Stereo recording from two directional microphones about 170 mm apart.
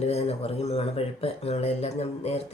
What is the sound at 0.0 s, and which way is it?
Speech, 40° left (ahead or behind).